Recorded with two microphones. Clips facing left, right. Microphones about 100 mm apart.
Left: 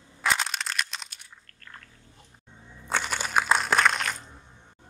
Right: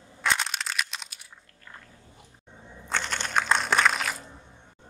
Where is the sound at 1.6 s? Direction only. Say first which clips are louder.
Even; 10° right (ahead or behind).